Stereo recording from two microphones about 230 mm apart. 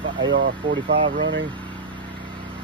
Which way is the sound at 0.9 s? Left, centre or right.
Right.